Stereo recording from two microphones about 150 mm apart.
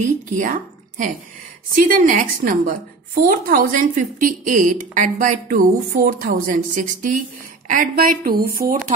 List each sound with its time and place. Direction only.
0.4 s a woman's voice: 60° right (ahead or behind)